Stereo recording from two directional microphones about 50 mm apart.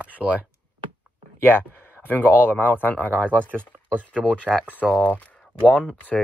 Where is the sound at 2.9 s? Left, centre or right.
Left.